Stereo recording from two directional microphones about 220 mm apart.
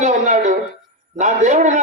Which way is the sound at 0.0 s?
35° right (ahead or behind).